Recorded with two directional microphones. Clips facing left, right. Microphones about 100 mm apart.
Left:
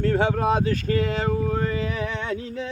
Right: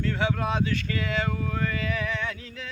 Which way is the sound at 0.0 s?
40° left (ahead or behind).